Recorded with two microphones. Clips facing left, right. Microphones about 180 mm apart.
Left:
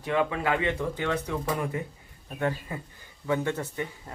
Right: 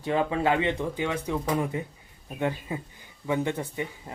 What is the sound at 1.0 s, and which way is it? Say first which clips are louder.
Speech: right 1 dB; 15° right (ahead or behind).